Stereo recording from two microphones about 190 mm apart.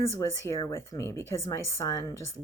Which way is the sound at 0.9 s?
15° left (ahead or behind).